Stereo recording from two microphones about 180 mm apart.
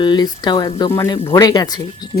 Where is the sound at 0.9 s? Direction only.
15° left (ahead or behind).